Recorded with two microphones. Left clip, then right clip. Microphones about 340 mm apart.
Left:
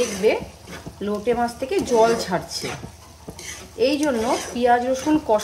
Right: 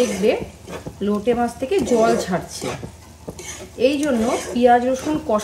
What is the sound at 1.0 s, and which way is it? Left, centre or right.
A woman's voice, centre.